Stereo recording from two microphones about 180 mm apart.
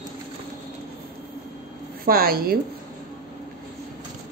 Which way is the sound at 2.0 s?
55° right (ahead or behind).